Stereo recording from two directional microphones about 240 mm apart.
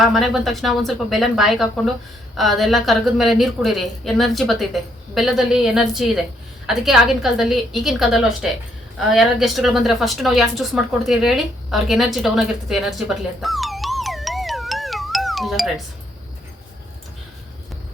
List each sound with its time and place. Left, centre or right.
0.0 s a woman's voice: centre